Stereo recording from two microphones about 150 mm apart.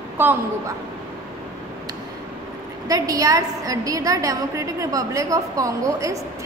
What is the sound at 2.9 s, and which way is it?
A woman's voice, 25° right (ahead or behind).